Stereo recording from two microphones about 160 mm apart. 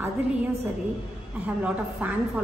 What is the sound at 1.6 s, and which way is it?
Speech, 5° right (ahead or behind).